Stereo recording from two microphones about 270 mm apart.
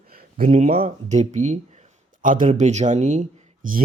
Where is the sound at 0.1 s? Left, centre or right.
Right.